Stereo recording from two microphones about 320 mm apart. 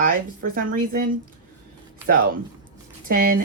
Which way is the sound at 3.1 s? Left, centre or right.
Right.